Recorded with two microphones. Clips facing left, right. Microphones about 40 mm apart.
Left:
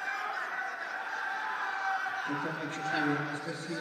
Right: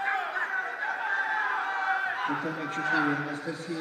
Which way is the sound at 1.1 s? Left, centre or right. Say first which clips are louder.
Right 8 dB; right.